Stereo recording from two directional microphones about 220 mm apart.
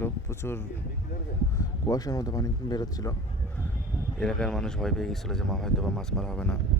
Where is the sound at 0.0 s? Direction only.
10° left (ahead or behind).